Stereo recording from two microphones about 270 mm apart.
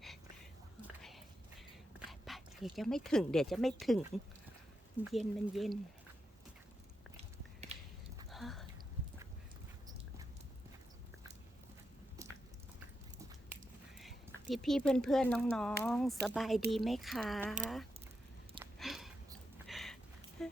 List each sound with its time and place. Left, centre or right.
2.0 s speech: centre
5.1 s speech: centre
7.7 s whispering: right
8.3 s a sound: centre
14.0 s speech: centre
18.6 s a sound: centre